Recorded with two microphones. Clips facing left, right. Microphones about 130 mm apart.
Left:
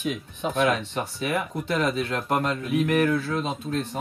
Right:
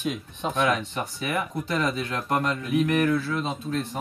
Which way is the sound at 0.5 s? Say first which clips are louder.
Left 1 dB; 35° left (ahead or behind).